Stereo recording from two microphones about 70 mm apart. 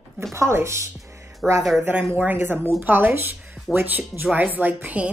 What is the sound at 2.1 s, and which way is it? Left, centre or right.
Speech, right.